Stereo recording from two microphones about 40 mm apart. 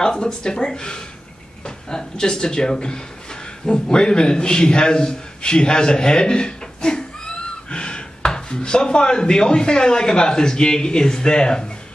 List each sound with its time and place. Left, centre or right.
0.0 s a man's voice: centre